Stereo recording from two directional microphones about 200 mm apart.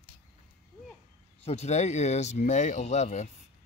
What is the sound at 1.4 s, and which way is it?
Speech, 30° left (ahead or behind).